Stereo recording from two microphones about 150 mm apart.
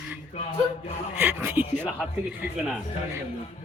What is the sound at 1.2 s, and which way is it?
Speech, 15° right (ahead or behind).